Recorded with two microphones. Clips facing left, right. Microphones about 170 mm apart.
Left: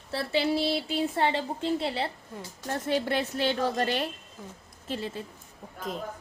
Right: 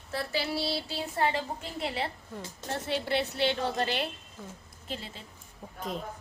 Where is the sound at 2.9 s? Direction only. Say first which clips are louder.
Left 3 dB; 50° left (ahead or behind).